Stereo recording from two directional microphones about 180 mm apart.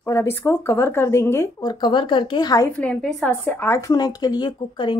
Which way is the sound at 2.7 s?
5° left (ahead or behind).